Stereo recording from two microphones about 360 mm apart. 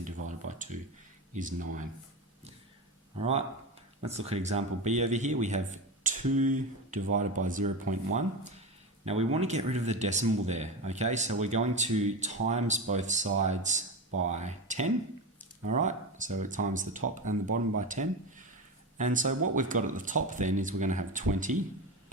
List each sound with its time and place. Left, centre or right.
0.3 s a sound: centre
1.3 s speech: right
3.2 s speech: centre